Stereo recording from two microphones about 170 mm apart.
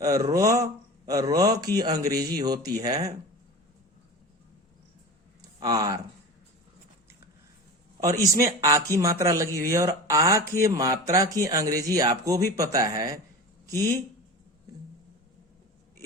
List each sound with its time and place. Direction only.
0.0 s speech: 20° right (ahead or behind)
5.4 s a sound: 25° right (ahead or behind)
8.4 s a man's voice: 20° right (ahead or behind)